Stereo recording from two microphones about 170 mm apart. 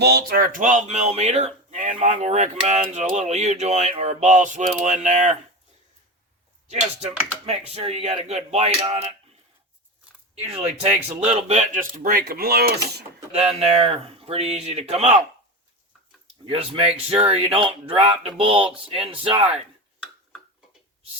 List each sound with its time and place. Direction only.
0.0 s speech: 65° right (ahead or behind); by 5.4 s 45° right (ahead or behind)
6.7 s speech: 40° right (ahead or behind)
10.4 s speech: 35° right (ahead or behind); by 13.1 s 70° right (ahead or behind)
13.6 s speech: 35° right (ahead or behind)
16.5 s speech: 35° right (ahead or behind)